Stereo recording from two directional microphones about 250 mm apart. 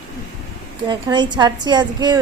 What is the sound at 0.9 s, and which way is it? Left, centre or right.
Speech, centre.